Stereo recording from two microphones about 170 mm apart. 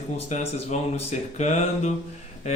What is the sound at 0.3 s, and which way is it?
Speech, 45° left (ahead or behind).